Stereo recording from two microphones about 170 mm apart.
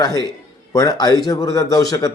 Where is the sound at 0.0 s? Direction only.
25° left (ahead or behind).